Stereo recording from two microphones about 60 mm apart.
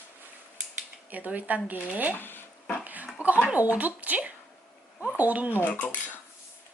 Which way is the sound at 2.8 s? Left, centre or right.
Right.